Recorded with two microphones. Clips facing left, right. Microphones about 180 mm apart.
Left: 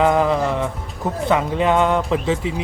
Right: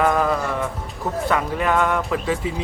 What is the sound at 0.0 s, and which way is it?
Music, 20° left (ahead or behind).